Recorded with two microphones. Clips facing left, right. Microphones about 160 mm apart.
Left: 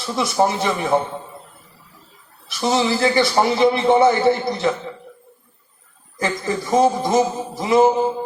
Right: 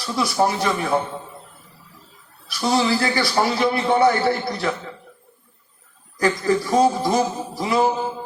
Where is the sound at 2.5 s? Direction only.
20° left (ahead or behind).